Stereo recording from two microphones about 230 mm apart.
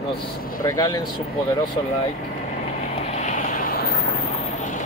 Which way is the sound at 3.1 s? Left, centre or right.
Left.